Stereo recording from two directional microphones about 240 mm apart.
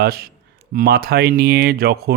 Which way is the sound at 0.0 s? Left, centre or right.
Right.